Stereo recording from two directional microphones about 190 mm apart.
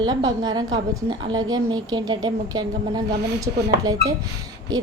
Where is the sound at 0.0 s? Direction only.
20° right (ahead or behind).